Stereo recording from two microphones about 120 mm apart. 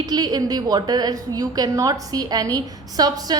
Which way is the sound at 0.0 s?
35° right (ahead or behind).